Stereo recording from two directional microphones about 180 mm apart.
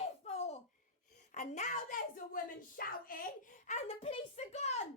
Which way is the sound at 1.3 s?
40° left (ahead or behind).